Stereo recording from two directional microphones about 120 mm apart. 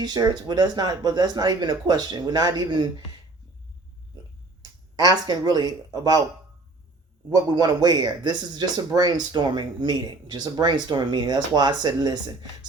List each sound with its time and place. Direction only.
0.0 s speech: 35° right (ahead or behind)
4.9 s speech: 35° right (ahead or behind)
7.3 s speech: 35° right (ahead or behind)